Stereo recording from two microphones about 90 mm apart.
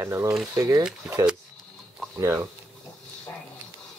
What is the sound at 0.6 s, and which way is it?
Speech, 40° right (ahead or behind).